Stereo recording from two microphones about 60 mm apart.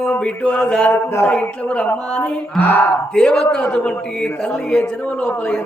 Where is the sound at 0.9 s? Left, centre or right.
Left.